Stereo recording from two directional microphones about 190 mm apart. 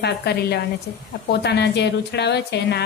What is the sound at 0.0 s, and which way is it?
A woman's voice, 60° left (ahead or behind).